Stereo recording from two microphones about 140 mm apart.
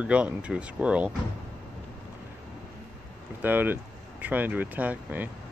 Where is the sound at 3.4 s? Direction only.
15° right (ahead or behind).